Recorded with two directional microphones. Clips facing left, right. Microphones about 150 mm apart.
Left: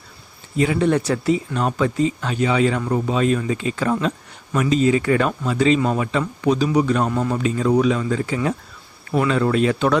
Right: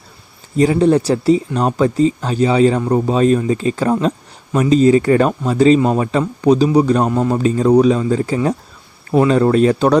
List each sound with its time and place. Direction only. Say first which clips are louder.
0.5 s speech: right 6 dB; 35° right (ahead or behind)